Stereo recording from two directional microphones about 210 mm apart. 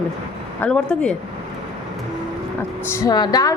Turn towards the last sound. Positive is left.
turn(degrees=20)  # may be behind; listen again after turning